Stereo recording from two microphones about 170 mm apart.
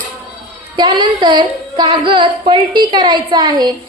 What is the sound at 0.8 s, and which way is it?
A woman's voice, 30° right (ahead or behind).